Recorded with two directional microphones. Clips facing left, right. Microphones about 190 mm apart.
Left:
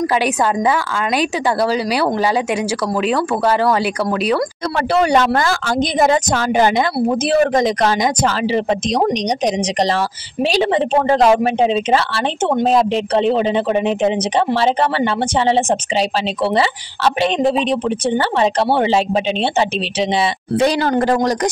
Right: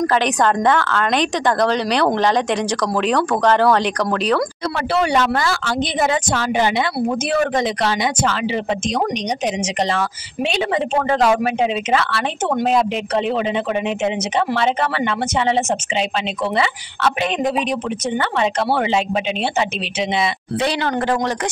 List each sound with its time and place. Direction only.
0.0 s a woman's voice: 10° left (ahead or behind)
4.7 s speech: 40° left (ahead or behind)